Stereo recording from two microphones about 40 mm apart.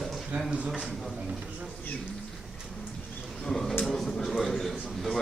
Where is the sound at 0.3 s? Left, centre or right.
Right.